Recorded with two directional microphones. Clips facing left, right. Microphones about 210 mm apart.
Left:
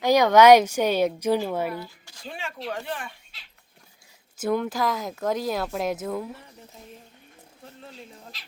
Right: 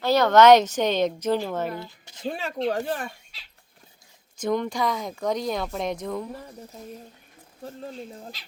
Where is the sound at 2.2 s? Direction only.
40° right (ahead or behind).